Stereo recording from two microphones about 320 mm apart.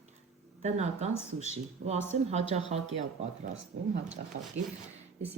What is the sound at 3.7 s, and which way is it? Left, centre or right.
Speech, right.